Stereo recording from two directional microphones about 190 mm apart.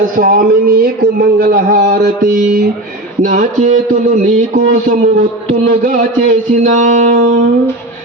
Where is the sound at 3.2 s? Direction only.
40° right (ahead or behind).